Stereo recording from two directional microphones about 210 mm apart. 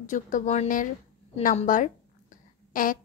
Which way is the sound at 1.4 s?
40° left (ahead or behind).